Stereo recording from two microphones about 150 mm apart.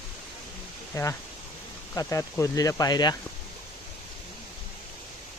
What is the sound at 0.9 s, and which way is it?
Speech, 20° left (ahead or behind).